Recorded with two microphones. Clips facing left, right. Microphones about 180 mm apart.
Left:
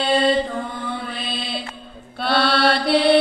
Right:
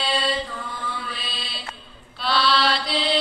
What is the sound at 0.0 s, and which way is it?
Mantra, 50° left (ahead or behind).